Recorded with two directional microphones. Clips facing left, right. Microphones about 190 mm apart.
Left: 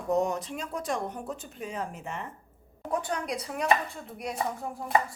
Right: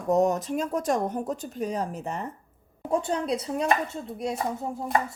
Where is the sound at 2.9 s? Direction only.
25° right (ahead or behind).